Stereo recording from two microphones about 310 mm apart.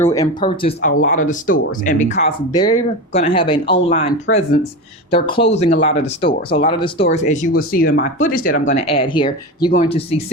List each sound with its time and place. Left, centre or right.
0.0 s speech: centre
4.3 s speech: left
5.1 s speech: centre